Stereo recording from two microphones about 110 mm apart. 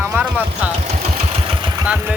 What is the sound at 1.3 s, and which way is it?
Engine, 55° right (ahead or behind).